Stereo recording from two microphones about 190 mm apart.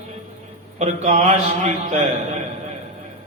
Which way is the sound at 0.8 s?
35° right (ahead or behind).